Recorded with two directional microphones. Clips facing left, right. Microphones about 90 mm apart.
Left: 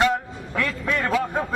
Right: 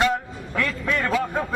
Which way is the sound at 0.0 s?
5° left (ahead or behind).